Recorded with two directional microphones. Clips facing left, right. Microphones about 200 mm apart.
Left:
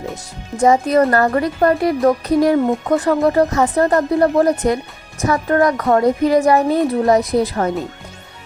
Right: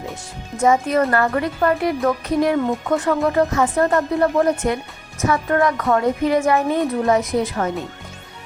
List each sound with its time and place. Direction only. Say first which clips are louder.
0.6 s a woman's voice: left 4 dB; 35° left (ahead or behind)